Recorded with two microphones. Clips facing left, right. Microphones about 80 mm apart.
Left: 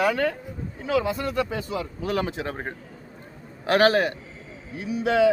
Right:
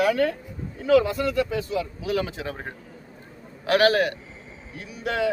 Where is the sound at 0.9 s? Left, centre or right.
Left.